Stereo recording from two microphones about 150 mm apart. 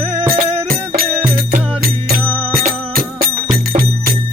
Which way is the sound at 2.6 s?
65° right (ahead or behind).